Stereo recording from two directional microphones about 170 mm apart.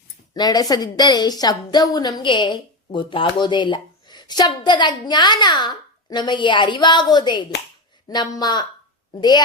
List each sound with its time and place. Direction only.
0.3 s a woman's voice: 25° left (ahead or behind)